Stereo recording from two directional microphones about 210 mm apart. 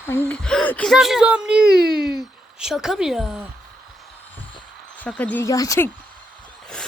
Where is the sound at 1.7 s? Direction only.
45° right (ahead or behind).